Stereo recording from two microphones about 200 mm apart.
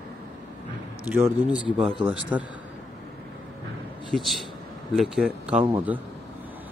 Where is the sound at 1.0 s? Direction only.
10° right (ahead or behind).